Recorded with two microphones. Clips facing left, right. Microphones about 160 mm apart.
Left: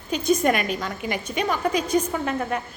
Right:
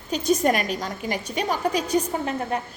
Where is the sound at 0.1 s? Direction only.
40° right (ahead or behind).